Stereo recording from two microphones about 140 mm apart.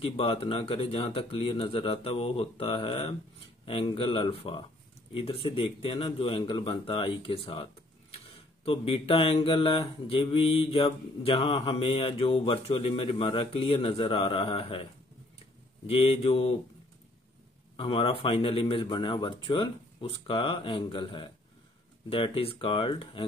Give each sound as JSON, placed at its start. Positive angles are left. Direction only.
{"t": 0.0, "sound": "mantra", "side_deg": 40}
{"t": 15.9, "sound": "speech", "side_deg": 45}
{"t": 17.7, "sound": "mantra", "side_deg": 40}